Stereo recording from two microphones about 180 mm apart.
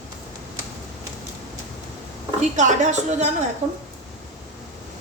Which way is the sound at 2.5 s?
40° right (ahead or behind).